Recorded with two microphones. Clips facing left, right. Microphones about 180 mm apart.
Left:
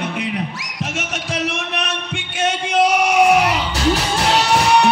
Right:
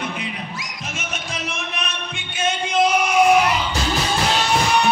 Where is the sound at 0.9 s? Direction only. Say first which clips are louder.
Left 5 dB; 75° left (ahead or behind).